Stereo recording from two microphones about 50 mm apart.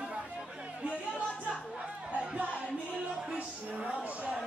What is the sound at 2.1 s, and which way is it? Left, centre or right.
Music, right.